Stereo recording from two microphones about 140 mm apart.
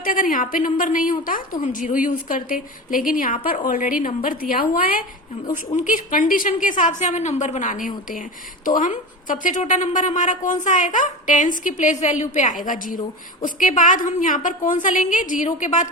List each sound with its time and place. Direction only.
0.0 s a woman's voice: 75° left (ahead or behind)
5.5 s a woman's voice: 70° left (ahead or behind)